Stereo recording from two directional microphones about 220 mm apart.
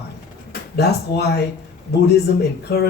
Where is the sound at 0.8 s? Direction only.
50° left (ahead or behind).